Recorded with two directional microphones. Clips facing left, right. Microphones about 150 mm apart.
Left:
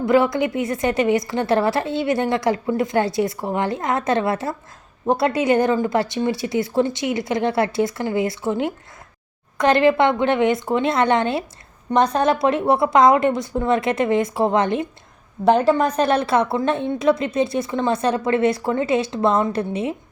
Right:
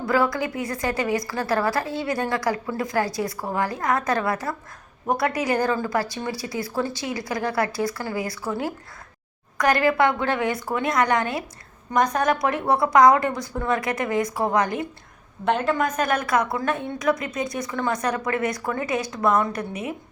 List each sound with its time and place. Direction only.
0.0 s a woman's voice: 20° left (ahead or behind)
15.4 s a woman's voice: 35° left (ahead or behind)